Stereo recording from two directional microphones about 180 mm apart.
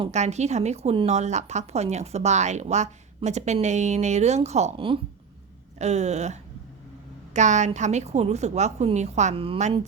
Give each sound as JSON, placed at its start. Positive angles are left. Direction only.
{"t": 0.1, "sound": "speech", "side_deg": -40}